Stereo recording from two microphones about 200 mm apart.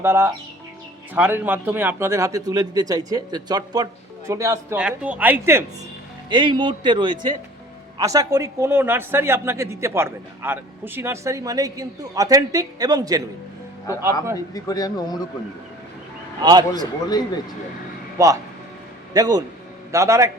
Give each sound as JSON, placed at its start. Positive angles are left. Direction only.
{"t": 0.0, "sound": "a man's voice", "side_deg": -10}
{"t": 6.3, "sound": "a man's voice", "side_deg": -25}
{"t": 14.5, "sound": "speech", "side_deg": 20}
{"t": 16.4, "sound": "speech", "side_deg": -20}
{"t": 17.1, "sound": "speech", "side_deg": 20}
{"t": 18.2, "sound": "a man's voice", "side_deg": -15}